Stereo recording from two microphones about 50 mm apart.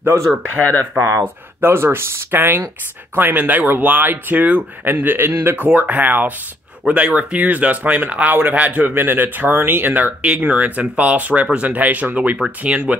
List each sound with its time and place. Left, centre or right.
0.1 s speech: right
0.6 s speech: left
1.2 s speech: right
3.2 s speech: right
5.0 s speech: right
5.6 s speech: right
6.8 s speech: right
8.9 s speech: right
10.4 s speech: right